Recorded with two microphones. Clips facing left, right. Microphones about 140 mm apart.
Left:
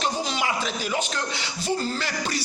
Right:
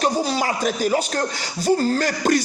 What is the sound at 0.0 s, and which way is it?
A man's voice, 40° right (ahead or behind).